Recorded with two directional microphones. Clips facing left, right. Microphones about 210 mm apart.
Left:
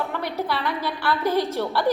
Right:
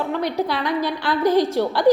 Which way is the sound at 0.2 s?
15° right (ahead or behind).